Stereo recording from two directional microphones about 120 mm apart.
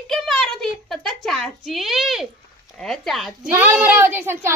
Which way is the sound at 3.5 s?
15° right (ahead or behind).